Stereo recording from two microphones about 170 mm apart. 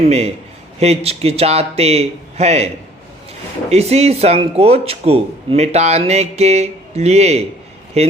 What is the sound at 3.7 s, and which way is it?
Speech, 40° right (ahead or behind).